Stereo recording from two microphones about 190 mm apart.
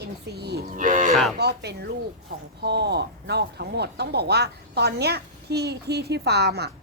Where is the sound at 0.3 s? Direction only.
60° right (ahead or behind).